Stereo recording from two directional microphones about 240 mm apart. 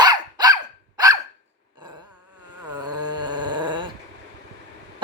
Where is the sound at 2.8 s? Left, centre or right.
Centre.